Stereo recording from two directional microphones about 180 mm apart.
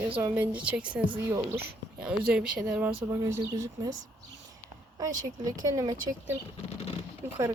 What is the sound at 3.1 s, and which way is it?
Speech, 15° right (ahead or behind).